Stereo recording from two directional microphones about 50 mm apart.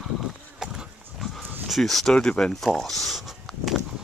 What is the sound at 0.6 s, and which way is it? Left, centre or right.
Pig, centre.